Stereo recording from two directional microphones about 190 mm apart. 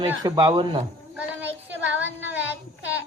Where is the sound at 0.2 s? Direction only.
20° right (ahead or behind).